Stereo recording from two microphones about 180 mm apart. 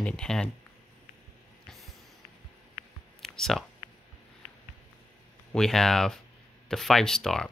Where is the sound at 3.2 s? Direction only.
Centre (ahead or behind).